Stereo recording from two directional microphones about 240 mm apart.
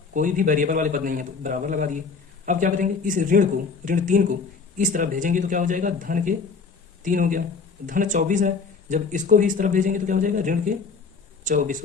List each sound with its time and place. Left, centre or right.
0.1 s speech: right